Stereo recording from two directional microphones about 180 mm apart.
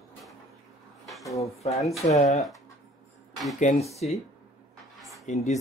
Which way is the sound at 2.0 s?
40° left (ahead or behind).